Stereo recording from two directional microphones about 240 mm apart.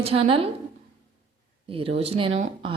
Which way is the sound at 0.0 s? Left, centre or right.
Right.